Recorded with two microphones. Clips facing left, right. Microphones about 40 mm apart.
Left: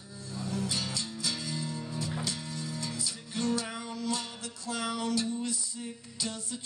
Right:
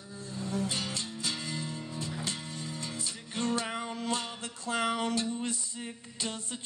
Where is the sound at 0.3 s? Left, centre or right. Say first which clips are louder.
Right 1 dB; right.